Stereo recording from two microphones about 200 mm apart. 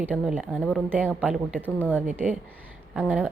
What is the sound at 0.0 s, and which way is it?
Speech, 5° right (ahead or behind).